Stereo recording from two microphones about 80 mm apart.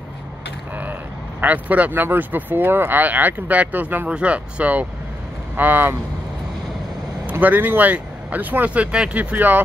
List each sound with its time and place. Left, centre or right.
1.4 s speech: centre
7.2 s speech: right